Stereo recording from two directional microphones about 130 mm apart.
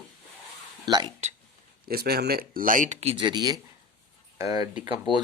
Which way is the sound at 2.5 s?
90° right.